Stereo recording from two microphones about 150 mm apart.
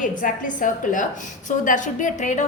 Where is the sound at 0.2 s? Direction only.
60° left (ahead or behind).